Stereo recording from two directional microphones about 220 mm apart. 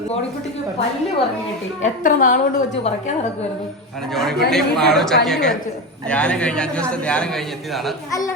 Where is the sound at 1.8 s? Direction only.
35° left (ahead or behind).